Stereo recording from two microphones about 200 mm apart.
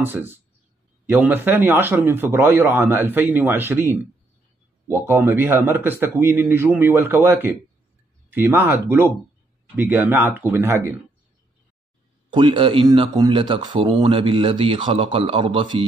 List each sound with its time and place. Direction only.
0.0 s speech: 10° right (ahead or behind)
12.3 s speech: 25° right (ahead or behind)